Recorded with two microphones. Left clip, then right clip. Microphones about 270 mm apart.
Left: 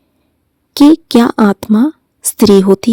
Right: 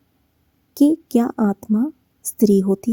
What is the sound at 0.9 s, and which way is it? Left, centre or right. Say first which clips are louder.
Speech: left 14 dB; left.